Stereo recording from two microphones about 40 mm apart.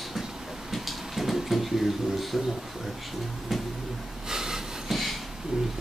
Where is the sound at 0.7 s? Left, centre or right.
Centre.